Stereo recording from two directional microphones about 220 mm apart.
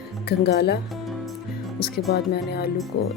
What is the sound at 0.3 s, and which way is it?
Speech, 50° left (ahead or behind).